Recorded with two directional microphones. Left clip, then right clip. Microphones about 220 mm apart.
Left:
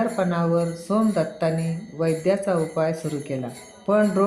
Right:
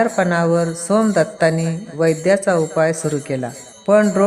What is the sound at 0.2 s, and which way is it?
Jingle bell, 40° right (ahead or behind).